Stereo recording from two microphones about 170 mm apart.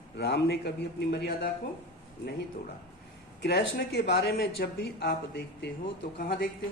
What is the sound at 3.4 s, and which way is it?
Speech, 80° left.